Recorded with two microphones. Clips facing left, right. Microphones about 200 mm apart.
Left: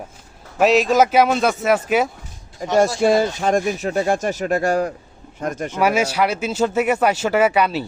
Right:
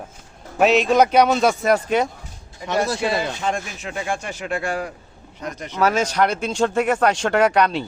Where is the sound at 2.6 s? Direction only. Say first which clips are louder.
Left 6 dB; 45° left (ahead or behind).